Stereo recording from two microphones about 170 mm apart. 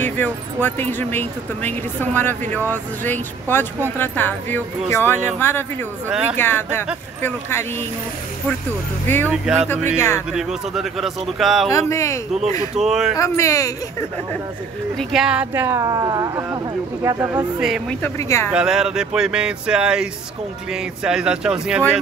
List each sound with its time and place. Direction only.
0.0 s speech: 10° left (ahead or behind)
9.0 s speech: 10° left (ahead or behind)
10.3 s speech: centre (ahead or behind)
11.9 s speech: 15° left (ahead or behind)
12.7 s speech: 5° right (ahead or behind)
13.2 s speech: 20° left (ahead or behind)
15.0 s speech: 5° right (ahead or behind)
17.6 s speech: centre (ahead or behind)
18.0 s speech: 15° left (ahead or behind)
18.5 s speech: 5° right (ahead or behind)